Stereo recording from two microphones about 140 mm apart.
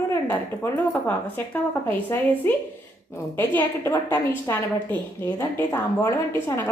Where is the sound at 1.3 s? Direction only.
15° left (ahead or behind).